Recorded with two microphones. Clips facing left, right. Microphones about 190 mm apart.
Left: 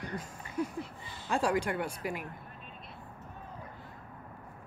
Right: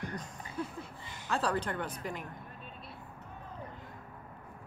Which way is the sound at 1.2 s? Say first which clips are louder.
Left 3 dB; 15° left (ahead or behind).